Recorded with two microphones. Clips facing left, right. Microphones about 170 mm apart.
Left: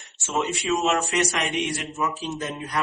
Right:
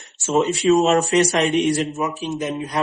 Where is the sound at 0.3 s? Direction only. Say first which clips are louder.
Right 8 dB; 40° right (ahead or behind).